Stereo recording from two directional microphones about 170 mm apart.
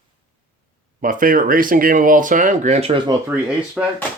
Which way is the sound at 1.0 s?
55° right (ahead or behind).